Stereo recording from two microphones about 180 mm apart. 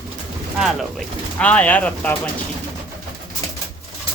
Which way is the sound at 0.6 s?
Centre (ahead or behind).